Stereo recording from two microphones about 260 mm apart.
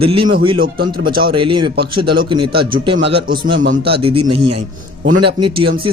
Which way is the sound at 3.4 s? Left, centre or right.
Right.